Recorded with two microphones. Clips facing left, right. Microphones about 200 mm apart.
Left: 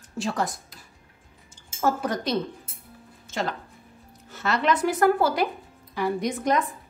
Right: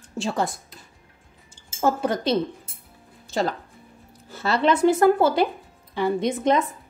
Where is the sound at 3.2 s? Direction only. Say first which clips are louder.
Right 5 dB; 35° right (ahead or behind).